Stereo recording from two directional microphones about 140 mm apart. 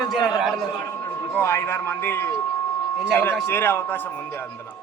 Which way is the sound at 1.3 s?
20° left (ahead or behind).